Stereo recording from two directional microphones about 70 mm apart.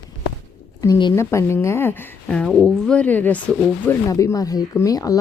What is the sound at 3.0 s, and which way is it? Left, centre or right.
Speech, left.